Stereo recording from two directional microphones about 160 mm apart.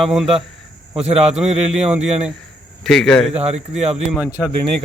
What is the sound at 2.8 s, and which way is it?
Speech, 5° left (ahead or behind).